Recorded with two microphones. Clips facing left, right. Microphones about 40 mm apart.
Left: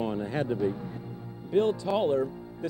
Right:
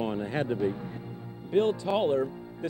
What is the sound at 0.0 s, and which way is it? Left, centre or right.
Speech, right.